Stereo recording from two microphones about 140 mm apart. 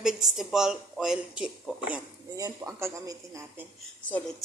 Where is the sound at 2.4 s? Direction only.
25° right (ahead or behind).